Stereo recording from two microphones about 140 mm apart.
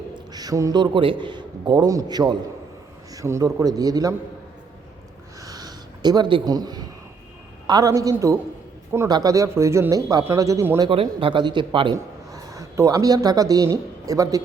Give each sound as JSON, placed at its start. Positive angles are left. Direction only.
{"t": 0.3, "sound": "a man's voice", "side_deg": -25}
{"t": 5.4, "sound": "a sound", "side_deg": -25}
{"t": 7.7, "sound": "a man's voice", "side_deg": -25}
{"t": 10.8, "sound": "a man's voice", "side_deg": -40}
{"t": 12.3, "sound": "speech", "side_deg": -25}